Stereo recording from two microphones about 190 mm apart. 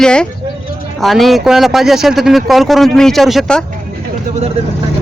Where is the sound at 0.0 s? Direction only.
5° left (ahead or behind).